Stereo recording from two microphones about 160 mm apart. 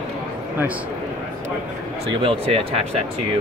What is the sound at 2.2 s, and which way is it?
Speech, 35° right (ahead or behind).